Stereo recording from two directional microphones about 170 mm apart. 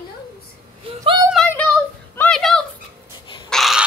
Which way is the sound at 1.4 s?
10° left (ahead or behind).